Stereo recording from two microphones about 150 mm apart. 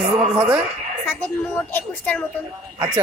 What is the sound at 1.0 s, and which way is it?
A child's voice, 15° left (ahead or behind).